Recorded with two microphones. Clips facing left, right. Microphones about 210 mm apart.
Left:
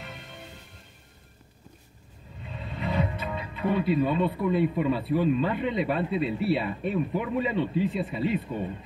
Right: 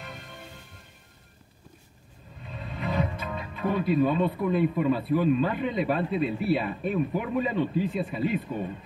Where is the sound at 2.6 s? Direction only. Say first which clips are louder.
Even; 45° right (ahead or behind).